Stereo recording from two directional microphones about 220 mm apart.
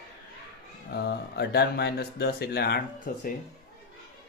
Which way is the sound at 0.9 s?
50° left (ahead or behind).